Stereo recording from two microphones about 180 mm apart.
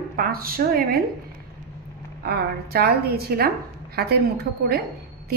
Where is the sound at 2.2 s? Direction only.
60° right (ahead or behind).